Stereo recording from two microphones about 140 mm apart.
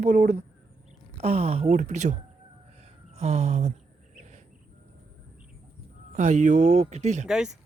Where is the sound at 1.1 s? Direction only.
45° right (ahead or behind).